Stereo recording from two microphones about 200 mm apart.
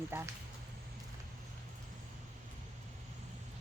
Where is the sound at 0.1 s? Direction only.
10° right (ahead or behind).